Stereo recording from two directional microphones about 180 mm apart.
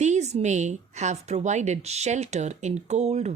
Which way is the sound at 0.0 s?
40° right (ahead or behind).